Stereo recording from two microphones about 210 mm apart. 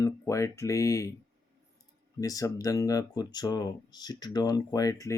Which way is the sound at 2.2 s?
15° left (ahead or behind).